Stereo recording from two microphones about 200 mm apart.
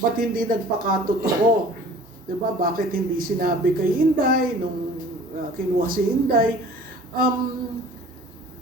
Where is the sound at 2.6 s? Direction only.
45° right (ahead or behind).